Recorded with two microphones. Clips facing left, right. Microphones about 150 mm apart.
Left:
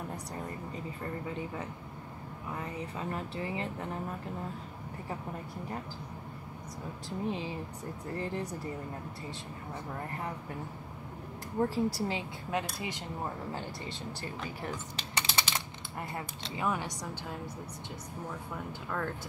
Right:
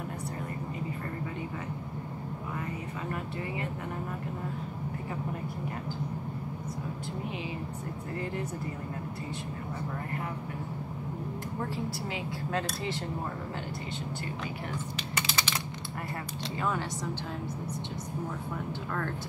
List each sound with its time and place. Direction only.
15.0 s typing: 30° left (ahead or behind)
16.5 s speech: 10° left (ahead or behind)